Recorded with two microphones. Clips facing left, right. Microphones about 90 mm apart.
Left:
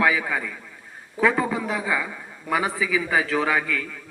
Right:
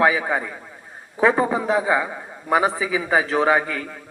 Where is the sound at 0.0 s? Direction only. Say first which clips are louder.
Right 3 dB; 30° right (ahead or behind).